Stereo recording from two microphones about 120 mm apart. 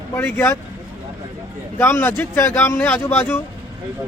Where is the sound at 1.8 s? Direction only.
20° left (ahead or behind).